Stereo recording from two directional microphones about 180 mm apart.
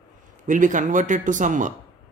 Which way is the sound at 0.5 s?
45° right (ahead or behind).